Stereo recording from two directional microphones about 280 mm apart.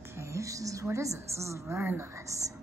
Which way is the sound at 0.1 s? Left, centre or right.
Centre.